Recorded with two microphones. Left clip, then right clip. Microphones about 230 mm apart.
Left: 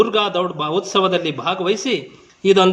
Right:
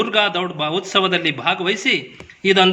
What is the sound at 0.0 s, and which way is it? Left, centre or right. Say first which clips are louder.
A man's voice: left 1 dB; right.